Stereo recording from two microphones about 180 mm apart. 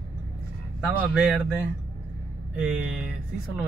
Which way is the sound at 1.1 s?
5° right (ahead or behind).